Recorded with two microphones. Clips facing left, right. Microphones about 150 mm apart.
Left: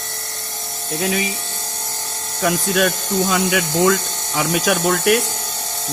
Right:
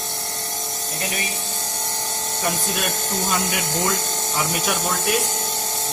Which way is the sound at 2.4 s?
90° left.